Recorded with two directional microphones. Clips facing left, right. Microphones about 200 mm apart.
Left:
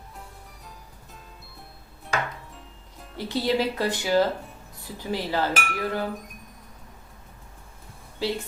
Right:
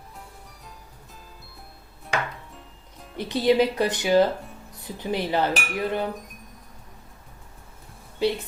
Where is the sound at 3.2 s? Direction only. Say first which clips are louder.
Right 4 dB; 20° right (ahead or behind).